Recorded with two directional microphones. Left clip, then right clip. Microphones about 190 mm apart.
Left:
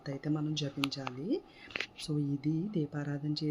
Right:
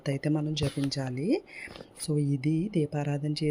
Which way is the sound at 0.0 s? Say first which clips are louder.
Right 6 dB; 45° right (ahead or behind).